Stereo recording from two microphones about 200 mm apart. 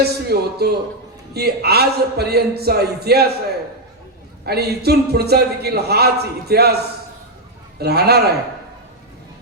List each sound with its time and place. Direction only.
0.0 s a man's voice: 55° right (ahead or behind)
4.4 s a man's voice: 55° right (ahead or behind)
7.8 s a man's voice: 55° right (ahead or behind)